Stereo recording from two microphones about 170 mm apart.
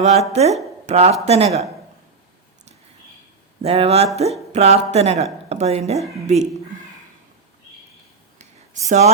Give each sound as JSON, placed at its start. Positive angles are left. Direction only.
{"t": 0.0, "sound": "a woman's voice", "side_deg": -40}
{"t": 3.6, "sound": "a woman's voice", "side_deg": -35}
{"t": 8.9, "sound": "a woman's voice", "side_deg": -40}